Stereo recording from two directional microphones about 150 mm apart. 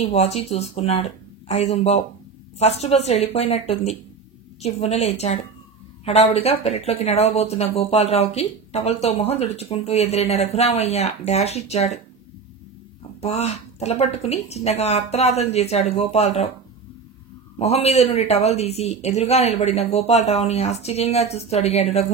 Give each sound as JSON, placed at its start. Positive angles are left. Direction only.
{"t": 0.0, "sound": "speech", "side_deg": 45}
{"t": 13.2, "sound": "speech", "side_deg": 45}
{"t": 17.6, "sound": "speech", "side_deg": 45}